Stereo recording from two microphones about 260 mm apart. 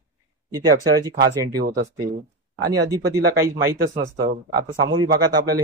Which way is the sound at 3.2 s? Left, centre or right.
Right.